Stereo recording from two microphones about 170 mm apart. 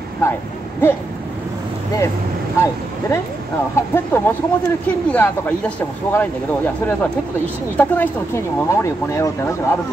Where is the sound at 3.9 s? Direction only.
15° left (ahead or behind).